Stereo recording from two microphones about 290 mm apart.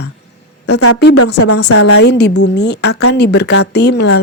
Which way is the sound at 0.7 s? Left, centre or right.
Left.